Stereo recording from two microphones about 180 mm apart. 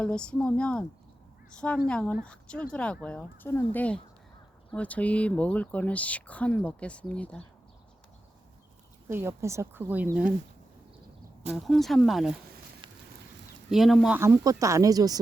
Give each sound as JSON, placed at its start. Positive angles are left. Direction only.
{"t": 0.0, "sound": "speech", "side_deg": 5}
{"t": 9.0, "sound": "speech", "side_deg": -15}
{"t": 11.5, "sound": "speech", "side_deg": 0}
{"t": 13.7, "sound": "speech", "side_deg": 0}
{"t": 14.2, "sound": "speech", "side_deg": -15}